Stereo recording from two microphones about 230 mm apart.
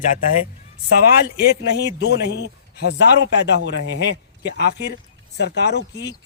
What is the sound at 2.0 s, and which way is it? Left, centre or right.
A man's voice, left.